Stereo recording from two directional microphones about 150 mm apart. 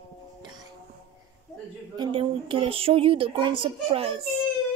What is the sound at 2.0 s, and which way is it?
Speech, 35° right (ahead or behind).